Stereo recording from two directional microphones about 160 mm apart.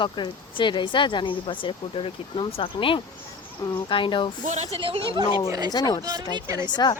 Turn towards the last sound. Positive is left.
turn(degrees=-20)  # may be behind; listen again after turning